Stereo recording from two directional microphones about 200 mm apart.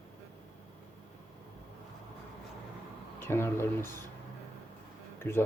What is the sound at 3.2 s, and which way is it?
Speech, 10° left (ahead or behind).